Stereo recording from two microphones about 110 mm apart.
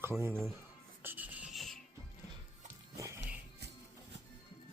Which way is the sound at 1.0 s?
15° right (ahead or behind).